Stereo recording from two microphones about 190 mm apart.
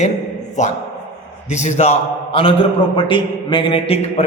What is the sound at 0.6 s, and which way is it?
A man's voice, 40° left (ahead or behind).